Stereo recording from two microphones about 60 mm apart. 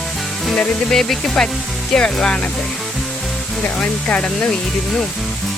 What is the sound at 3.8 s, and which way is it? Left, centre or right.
Speech, centre.